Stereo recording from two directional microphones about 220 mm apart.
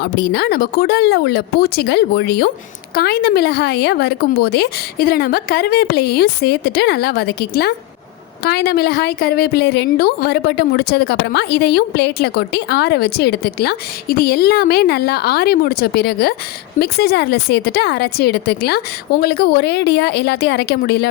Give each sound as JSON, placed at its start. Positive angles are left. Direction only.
{"t": 0.0, "sound": "a woman's voice", "side_deg": 50}